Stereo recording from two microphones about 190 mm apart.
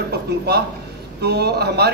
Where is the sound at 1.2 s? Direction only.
60° right (ahead or behind).